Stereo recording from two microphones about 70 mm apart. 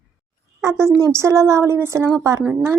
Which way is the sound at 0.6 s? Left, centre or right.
Right.